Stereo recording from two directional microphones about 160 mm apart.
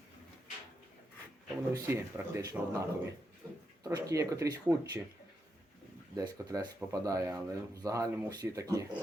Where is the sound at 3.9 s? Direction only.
20° right (ahead or behind).